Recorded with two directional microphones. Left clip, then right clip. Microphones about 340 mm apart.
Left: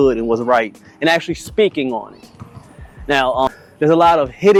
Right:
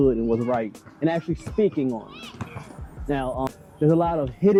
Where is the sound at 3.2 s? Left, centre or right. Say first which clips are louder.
Left 12 dB; left.